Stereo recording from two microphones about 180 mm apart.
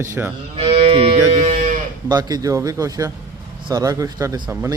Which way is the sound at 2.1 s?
20° right (ahead or behind).